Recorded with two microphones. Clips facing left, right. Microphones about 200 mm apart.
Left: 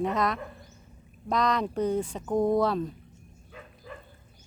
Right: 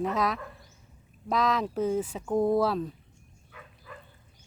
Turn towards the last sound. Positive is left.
turn(degrees=30)  # may be behind; listen again after turning